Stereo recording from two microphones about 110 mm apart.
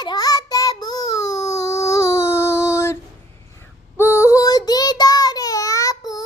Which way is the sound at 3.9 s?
25° left (ahead or behind).